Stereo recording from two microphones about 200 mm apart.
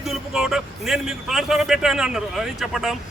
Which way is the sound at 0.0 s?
Centre (ahead or behind).